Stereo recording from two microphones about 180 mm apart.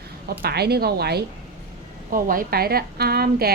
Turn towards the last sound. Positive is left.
turn(degrees=-60)  # may be behind; listen again after turning